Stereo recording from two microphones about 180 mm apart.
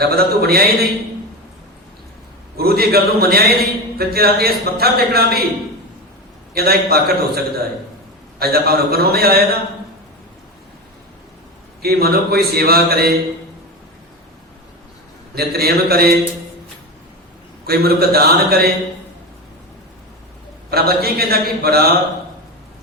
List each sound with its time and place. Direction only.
0.0 s a man's voice: 60° right (ahead or behind)
2.6 s a man's voice: 60° right (ahead or behind)
6.6 s a man's voice: 60° right (ahead or behind)
11.8 s a man's voice: 60° right (ahead or behind)
15.4 s a man's voice: 60° right (ahead or behind)
17.7 s a man's voice: 60° right (ahead or behind)
20.7 s a man's voice: 60° right (ahead or behind)